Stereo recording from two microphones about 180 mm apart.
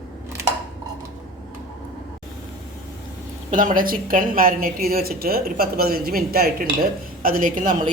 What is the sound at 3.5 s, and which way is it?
A woman's voice, 45° right (ahead or behind).